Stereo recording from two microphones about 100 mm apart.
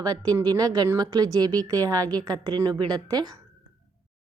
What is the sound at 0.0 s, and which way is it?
Speech, 40° right (ahead or behind).